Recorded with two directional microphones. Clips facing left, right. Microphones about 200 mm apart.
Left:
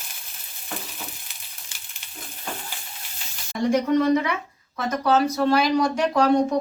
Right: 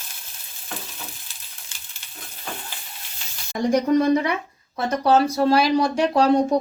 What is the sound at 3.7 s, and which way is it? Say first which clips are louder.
Speech: right 1 dB; 35° right (ahead or behind).